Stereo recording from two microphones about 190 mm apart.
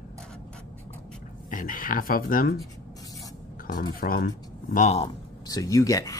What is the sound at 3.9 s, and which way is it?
Speech, 50° left (ahead or behind).